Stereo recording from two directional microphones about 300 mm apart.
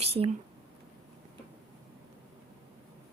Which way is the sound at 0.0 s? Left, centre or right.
Right.